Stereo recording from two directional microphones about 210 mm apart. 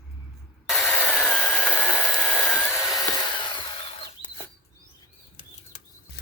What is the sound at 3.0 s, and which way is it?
Tools, 20° left (ahead or behind).